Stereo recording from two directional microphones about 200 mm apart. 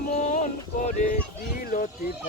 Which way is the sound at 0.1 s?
40° left (ahead or behind).